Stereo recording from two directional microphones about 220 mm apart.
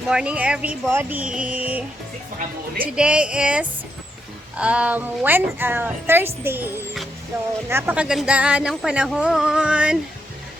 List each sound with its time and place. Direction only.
0.1 s speech: 5° right (ahead or behind)
2.8 s a woman's voice: 5° right (ahead or behind)